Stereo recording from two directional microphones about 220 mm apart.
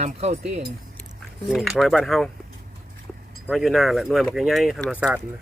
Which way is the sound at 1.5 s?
Centre (ahead or behind).